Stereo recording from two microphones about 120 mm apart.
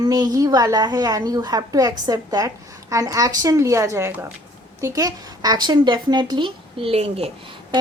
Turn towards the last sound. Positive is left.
turn(degrees=-55)  # may be behind; listen again after turning